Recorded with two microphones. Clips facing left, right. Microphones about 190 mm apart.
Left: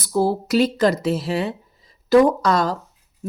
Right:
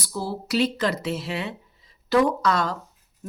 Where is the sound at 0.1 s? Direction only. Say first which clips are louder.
Left 9 dB; 50° left (ahead or behind).